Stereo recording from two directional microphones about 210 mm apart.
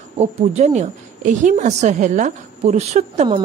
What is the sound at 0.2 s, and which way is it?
A woman's voice, 30° right (ahead or behind).